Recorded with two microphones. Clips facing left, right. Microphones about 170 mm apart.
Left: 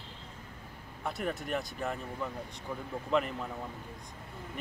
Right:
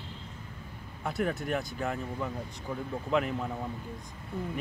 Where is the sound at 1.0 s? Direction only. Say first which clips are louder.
Right 4 dB; centre (ahead or behind).